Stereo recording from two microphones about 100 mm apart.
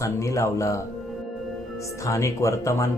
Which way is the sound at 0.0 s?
30° left (ahead or behind).